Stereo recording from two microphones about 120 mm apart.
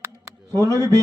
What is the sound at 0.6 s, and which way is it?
Speech, 25° right (ahead or behind).